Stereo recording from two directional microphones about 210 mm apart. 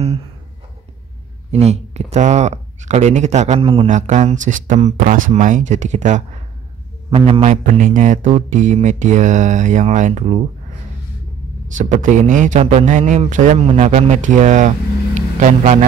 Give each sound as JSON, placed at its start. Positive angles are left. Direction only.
{"t": 1.5, "sound": "speech", "side_deg": -30}
{"t": 11.8, "sound": "speech", "side_deg": -35}